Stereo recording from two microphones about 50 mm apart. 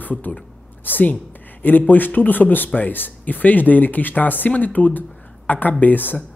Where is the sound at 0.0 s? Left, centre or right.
Left.